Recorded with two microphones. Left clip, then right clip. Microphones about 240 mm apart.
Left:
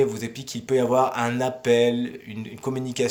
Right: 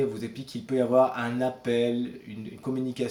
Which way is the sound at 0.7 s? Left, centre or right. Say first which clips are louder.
Left 2 dB; left.